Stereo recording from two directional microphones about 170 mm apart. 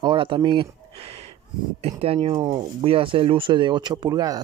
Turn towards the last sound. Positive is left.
turn(degrees=-20)  # may be behind; listen again after turning